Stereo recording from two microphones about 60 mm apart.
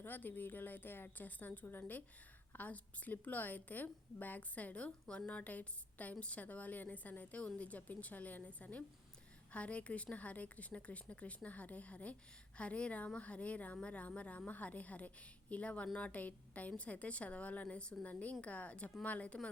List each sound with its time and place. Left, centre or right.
0.0 s a woman's voice: left